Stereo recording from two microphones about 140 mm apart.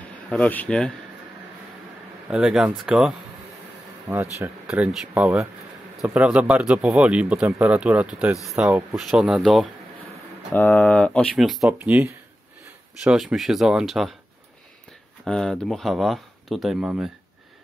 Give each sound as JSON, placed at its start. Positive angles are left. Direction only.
{"t": 0.3, "sound": "speech", "side_deg": 10}
{"t": 2.2, "sound": "speech", "side_deg": -5}
{"t": 4.1, "sound": "speech", "side_deg": -20}
{"t": 4.6, "sound": "speech", "side_deg": -5}
{"t": 10.5, "sound": "speech", "side_deg": 10}
{"t": 11.3, "sound": "speech", "side_deg": 0}
{"t": 15.2, "sound": "speech", "side_deg": 5}